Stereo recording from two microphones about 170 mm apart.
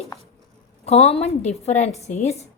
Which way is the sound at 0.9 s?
40° left (ahead or behind).